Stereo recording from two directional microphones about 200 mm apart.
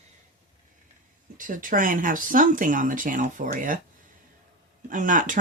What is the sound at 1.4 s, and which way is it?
Speech, 40° right (ahead or behind).